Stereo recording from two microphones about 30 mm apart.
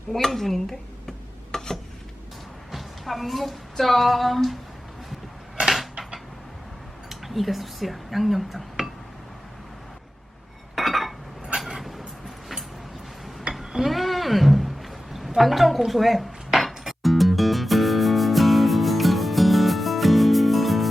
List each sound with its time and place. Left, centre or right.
0.1 s speech: centre
1.5 s stir: centre
2.7 s a woman's voice: centre
5.7 s a sound: centre
7.1 s speech: centre
10.8 s a sound: centre
13.6 s a sound: centre
15.4 s a woman's voice: centre
16.6 s music: centre